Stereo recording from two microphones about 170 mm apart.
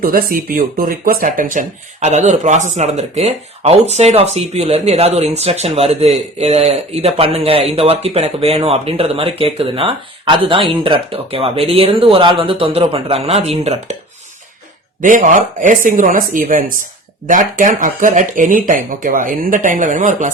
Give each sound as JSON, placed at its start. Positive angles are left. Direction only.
{"t": 0.0, "sound": "speech", "side_deg": -60}
{"t": 15.0, "sound": "speech", "side_deg": -50}